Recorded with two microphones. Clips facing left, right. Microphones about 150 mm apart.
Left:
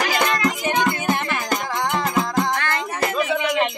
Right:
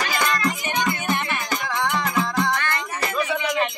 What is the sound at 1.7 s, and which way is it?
Music, 45° left (ahead or behind).